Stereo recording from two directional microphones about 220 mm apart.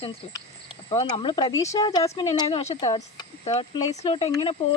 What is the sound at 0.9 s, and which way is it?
Speech, 25° left (ahead or behind).